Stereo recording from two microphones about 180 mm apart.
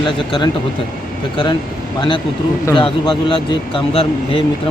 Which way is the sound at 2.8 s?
30° left (ahead or behind).